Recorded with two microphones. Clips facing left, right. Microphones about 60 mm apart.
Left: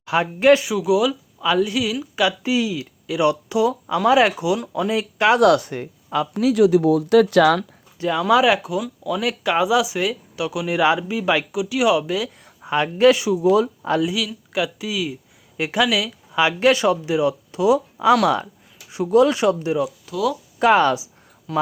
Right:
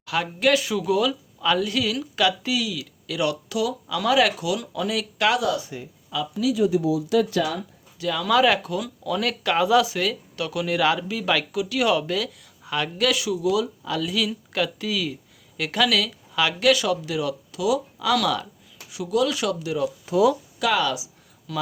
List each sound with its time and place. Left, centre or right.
0.0 s speech: left
0.7 s speech: centre
5.4 s speech: left
6.5 s speech: left
7.9 s speech: left
8.4 s speech: centre
12.6 s speech: left
14.2 s speech: centre; by 19.8 s left
20.1 s speech: right
20.6 s a sound: left